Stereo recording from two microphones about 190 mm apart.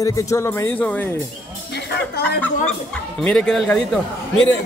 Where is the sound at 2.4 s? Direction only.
5° left (ahead or behind).